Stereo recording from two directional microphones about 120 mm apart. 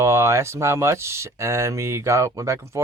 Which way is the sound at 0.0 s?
25° right (ahead or behind).